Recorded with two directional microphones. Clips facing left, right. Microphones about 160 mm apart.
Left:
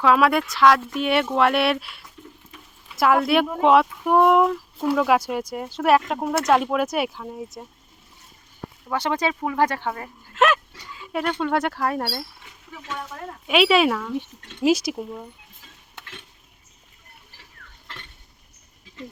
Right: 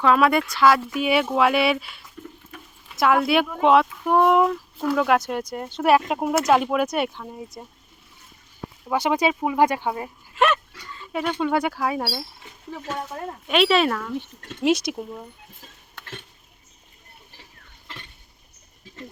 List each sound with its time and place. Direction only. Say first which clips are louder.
0.0 s speech: even; centre (ahead or behind)
2.5 s a sound: right 4 dB; 55° right (ahead or behind)
2.9 s speech: left 1 dB; 5° left (ahead or behind)
8.9 s speech: right 3 dB; 10° right (ahead or behind)
10.3 s speech: left 1 dB; centre (ahead or behind)
12.7 s speech: right 3 dB; 40° right (ahead or behind)
13.5 s speech: left 1 dB; 5° left (ahead or behind)